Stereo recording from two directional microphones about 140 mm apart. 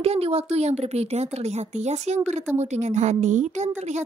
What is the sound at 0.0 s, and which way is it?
A woman's voice, 45° right (ahead or behind).